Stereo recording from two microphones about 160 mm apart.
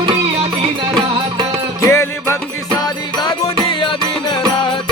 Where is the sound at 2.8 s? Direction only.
30° left (ahead or behind).